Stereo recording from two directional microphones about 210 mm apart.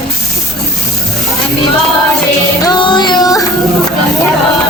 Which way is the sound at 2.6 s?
20° left (ahead or behind).